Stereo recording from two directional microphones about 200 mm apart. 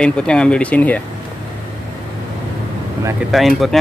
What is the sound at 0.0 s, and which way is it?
Speech, 5° left (ahead or behind).